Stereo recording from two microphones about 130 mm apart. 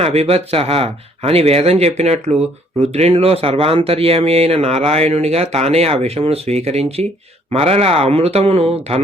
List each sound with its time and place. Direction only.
0.0 s speech: 50° right (ahead or behind)